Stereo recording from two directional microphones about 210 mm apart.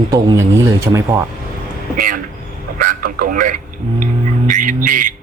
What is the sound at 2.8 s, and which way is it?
Radio, 45° right (ahead or behind).